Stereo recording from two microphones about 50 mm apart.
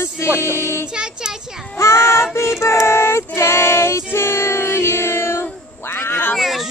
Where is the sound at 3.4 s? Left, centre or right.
Left.